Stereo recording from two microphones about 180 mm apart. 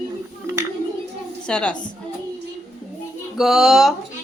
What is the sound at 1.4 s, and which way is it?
Speech, 5° left (ahead or behind).